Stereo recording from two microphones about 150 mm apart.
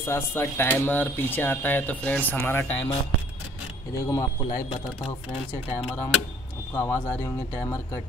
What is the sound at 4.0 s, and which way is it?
Speech, 15° left (ahead or behind).